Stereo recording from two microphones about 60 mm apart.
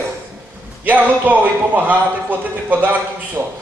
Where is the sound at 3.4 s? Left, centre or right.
Right.